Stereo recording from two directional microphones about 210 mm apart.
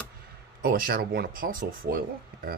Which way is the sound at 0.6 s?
45° right (ahead or behind).